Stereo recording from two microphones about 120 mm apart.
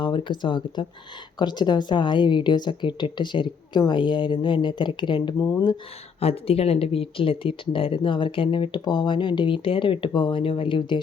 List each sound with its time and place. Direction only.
0.0 s a woman's voice: 40° left (ahead or behind)
5.4 s speech: 30° left (ahead or behind)
6.1 s speech: 55° left (ahead or behind)